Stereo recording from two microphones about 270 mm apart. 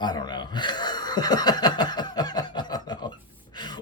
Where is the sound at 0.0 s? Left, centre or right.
Centre.